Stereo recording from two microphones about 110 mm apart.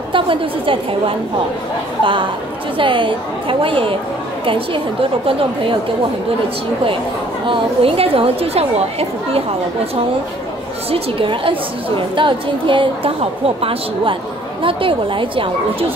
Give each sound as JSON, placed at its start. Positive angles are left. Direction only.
{"t": 0.1, "sound": "a woman's voice", "side_deg": -50}
{"t": 2.8, "sound": "a woman's voice", "side_deg": -50}
{"t": 7.4, "sound": "a woman's voice", "side_deg": -55}
{"t": 10.9, "sound": "a woman's voice", "side_deg": -55}